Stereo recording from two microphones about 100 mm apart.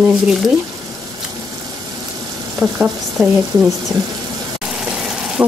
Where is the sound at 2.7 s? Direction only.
10° right (ahead or behind).